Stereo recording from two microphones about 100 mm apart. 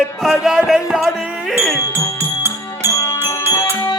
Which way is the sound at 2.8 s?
25° right (ahead or behind).